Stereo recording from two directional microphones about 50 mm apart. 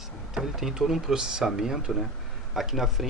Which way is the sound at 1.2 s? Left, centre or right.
Centre.